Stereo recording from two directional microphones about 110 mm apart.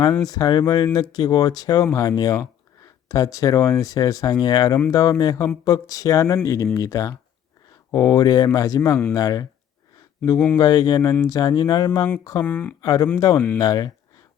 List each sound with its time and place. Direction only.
0.0 s speech: 35° left (ahead or behind)
10.3 s speech: 10° left (ahead or behind)
10.6 s speech: 35° left (ahead or behind)
12.4 s speech: 15° left (ahead or behind)
12.8 s speech: 35° left (ahead or behind)